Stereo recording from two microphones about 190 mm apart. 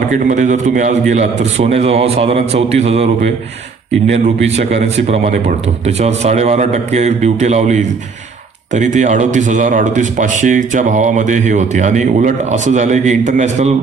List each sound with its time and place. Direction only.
0.1 s a man's voice: 40° right (ahead or behind)
4.1 s a man's voice: 35° right (ahead or behind)